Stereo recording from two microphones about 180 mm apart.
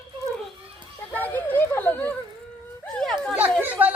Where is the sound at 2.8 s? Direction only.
5° left (ahead or behind).